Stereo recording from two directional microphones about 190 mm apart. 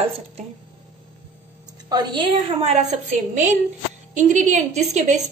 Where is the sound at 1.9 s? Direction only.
25° right (ahead or behind).